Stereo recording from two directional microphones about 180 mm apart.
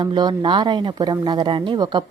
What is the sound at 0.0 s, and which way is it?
A woman's voice, 25° right (ahead or behind).